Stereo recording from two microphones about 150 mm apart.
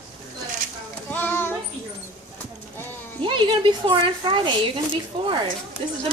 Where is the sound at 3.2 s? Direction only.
35° right (ahead or behind).